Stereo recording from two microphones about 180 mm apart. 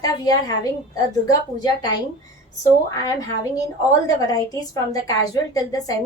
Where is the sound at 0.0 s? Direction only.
20° left (ahead or behind).